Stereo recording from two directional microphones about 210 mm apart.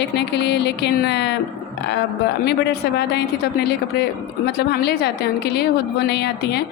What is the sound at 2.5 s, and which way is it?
Speech, 50° left (ahead or behind).